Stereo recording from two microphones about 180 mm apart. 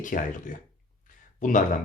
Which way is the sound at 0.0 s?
45° left (ahead or behind).